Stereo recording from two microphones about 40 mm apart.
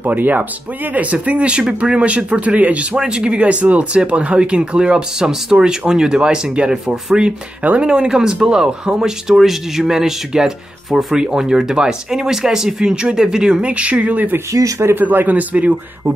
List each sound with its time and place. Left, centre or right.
0.0 s a man's voice: right
3.0 s speech: centre
3.3 s speech: right; by 11.1 s centre
11.1 s speech: centre
13.6 s speech: right
14.3 s speech: right
15.0 s a man's voice: right